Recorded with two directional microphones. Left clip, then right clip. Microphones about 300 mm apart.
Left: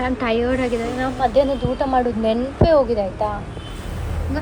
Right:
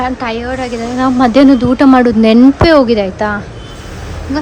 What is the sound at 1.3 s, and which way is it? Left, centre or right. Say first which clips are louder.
Speech: right 10 dB; right.